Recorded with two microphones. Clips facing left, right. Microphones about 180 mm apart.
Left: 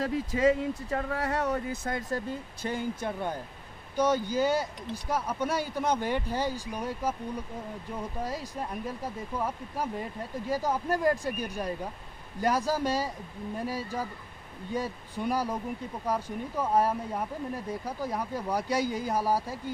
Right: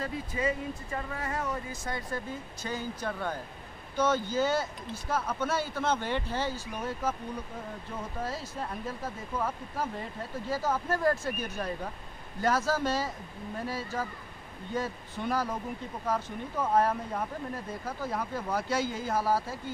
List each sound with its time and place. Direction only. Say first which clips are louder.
0.0 s speech: left 6 dB; 90° left; by 7.2 s 10° left (ahead or behind)
8.2 s speech: even; 15° left (ahead or behind)